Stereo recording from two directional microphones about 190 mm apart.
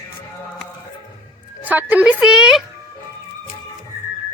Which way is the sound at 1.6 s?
10° right (ahead or behind).